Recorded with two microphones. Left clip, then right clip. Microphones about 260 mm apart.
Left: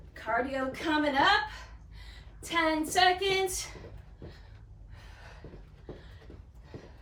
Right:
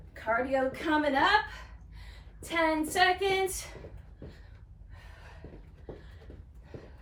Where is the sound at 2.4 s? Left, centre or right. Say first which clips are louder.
Even; centre.